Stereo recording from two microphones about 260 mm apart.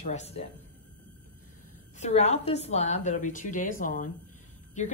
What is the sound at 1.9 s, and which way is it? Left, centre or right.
A woman's voice, left.